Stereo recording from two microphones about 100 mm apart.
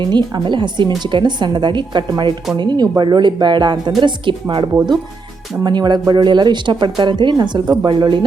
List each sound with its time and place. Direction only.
0.0 s a woman's voice: 45° right (ahead or behind)